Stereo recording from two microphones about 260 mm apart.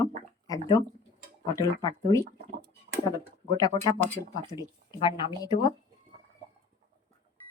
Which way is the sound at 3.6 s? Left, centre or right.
Centre.